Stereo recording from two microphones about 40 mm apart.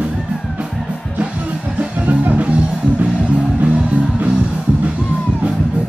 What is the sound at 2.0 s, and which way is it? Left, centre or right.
Music, right.